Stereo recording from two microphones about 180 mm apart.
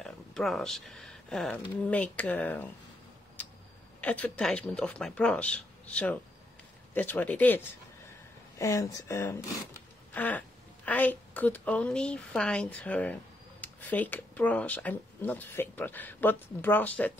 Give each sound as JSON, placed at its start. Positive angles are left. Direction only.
{"t": 0.0, "sound": "speech", "side_deg": 0}
{"t": 4.0, "sound": "a woman's voice", "side_deg": 10}